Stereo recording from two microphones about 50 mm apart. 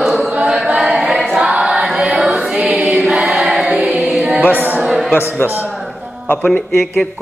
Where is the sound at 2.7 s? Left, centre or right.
Right.